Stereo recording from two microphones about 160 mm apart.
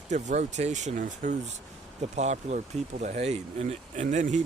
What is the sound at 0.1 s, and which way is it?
Speech, 45° right (ahead or behind).